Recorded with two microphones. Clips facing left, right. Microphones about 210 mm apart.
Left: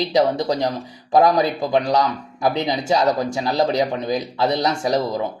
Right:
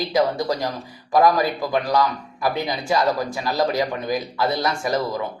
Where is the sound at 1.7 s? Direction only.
25° left (ahead or behind).